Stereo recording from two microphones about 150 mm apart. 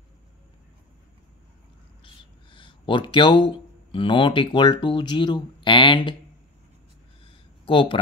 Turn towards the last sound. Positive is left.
turn(degrees=35)  # may be behind; listen again after turning